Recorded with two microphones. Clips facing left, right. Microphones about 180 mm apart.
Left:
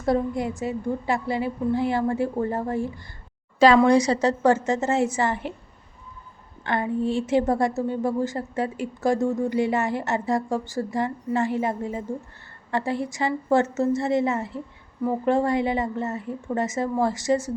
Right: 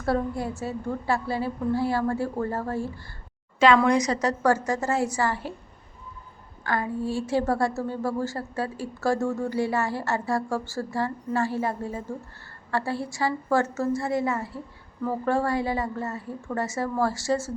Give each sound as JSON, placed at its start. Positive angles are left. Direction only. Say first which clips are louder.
{"t": 0.0, "sound": "a woman's voice", "louder": "left 3 dB", "side_deg": 20}
{"t": 3.8, "sound": "a woman's voice", "louder": "left 4 dB", "side_deg": 30}
{"t": 6.7, "sound": "a woman's voice", "louder": "left 3 dB", "side_deg": 25}